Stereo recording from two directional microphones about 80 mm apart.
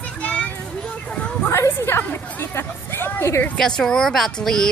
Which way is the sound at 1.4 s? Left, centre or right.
Left.